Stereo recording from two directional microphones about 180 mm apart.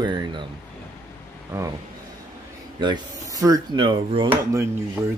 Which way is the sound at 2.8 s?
25° right (ahead or behind).